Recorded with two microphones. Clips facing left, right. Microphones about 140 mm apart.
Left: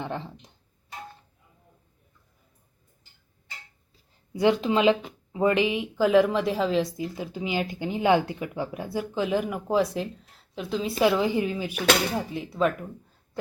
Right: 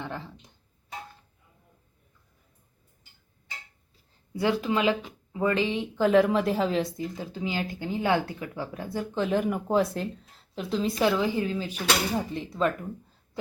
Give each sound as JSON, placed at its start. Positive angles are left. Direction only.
{"t": 0.0, "sound": "speech", "side_deg": 20}
{"t": 4.4, "sound": "speech", "side_deg": 20}
{"t": 11.0, "sound": "speech", "side_deg": 15}
{"t": 12.1, "sound": "speech", "side_deg": 5}